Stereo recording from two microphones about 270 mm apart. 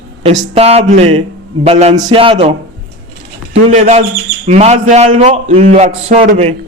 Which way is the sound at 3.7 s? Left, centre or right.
Right.